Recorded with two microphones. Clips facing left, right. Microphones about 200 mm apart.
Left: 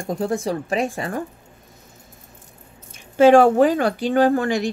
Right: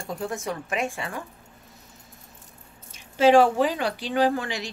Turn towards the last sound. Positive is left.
turn(degrees=50)  # may be behind; listen again after turning